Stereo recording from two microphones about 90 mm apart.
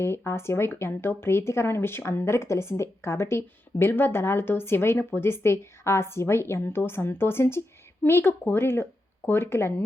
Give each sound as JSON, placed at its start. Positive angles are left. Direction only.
{"t": 0.0, "sound": "a woman's voice", "side_deg": 30}